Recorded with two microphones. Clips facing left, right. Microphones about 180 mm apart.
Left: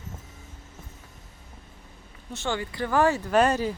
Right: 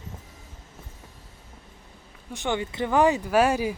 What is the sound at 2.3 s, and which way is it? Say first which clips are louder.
Speech: right 2 dB; 15° right (ahead or behind).